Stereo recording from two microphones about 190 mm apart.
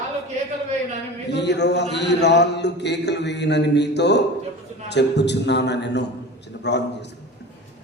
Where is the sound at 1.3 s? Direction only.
65° left (ahead or behind).